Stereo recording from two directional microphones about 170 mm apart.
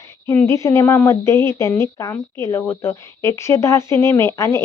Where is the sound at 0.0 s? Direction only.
15° left (ahead or behind).